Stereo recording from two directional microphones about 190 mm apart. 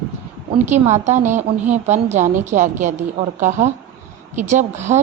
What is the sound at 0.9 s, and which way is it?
A woman's voice, 40° right (ahead or behind).